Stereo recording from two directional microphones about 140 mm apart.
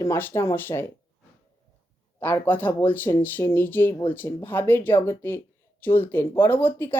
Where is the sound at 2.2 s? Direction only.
15° left (ahead or behind).